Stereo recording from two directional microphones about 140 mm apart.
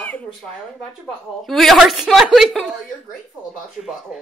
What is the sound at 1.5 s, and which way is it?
A woman's voice, centre (ahead or behind).